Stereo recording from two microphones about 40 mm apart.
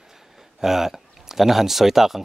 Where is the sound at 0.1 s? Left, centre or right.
Centre.